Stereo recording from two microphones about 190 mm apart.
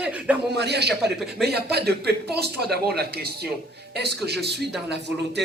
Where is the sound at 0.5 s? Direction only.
60° right (ahead or behind).